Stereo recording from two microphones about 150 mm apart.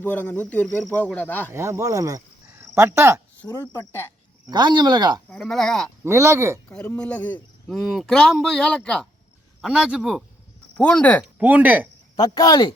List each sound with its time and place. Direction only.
0.0 s a man's voice: 10° left (ahead or behind)
1.5 s speech: 20° right (ahead or behind)
3.4 s speech: 5° left (ahead or behind)
4.4 s speech: 30° right (ahead or behind)
5.3 s speech: centre (ahead or behind)
6.1 s speech: 20° right (ahead or behind)
6.7 s a man's voice: 10° left (ahead or behind)
7.8 s a man's voice: centre (ahead or behind)
11.3 s speech: 10° right (ahead or behind)
12.1 s speech: 25° left (ahead or behind)